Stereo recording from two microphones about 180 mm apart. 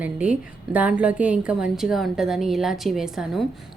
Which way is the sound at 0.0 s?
10° right (ahead or behind).